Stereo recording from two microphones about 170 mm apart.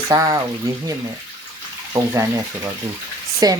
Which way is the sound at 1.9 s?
20° right (ahead or behind).